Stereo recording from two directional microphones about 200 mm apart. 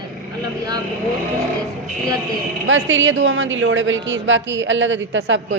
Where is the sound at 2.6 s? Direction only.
75° right (ahead or behind).